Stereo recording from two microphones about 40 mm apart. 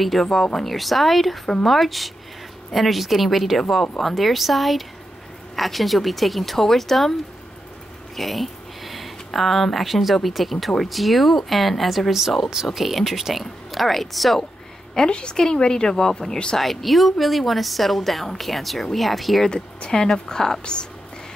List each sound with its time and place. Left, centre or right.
0.0 s a woman's voice: centre
8.2 s a woman's voice: centre
15.0 s a woman's voice: left
16.5 s a woman's voice: centre
19.4 s speech: centre